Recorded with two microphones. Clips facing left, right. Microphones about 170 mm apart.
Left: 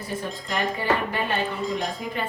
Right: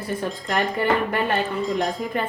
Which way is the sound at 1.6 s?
Centre (ahead or behind).